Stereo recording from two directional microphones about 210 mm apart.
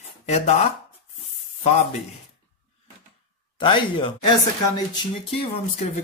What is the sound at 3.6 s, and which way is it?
Speech, 25° left (ahead or behind).